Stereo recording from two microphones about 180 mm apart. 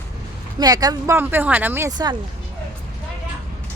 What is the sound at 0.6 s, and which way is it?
Speech, 20° right (ahead or behind).